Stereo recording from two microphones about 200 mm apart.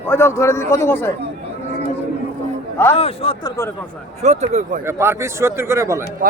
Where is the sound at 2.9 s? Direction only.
30° left (ahead or behind).